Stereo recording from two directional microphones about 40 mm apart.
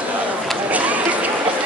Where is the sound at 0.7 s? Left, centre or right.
Right.